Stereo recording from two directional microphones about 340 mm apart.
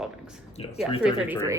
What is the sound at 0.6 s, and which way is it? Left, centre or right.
Speech, centre.